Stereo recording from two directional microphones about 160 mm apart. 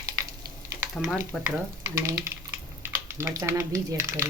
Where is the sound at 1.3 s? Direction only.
Centre (ahead or behind).